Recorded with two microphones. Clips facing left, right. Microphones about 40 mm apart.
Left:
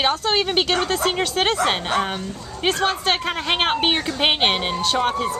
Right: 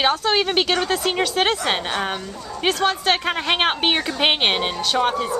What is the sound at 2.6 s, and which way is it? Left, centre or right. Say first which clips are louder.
Speech: right 1 dB; centre.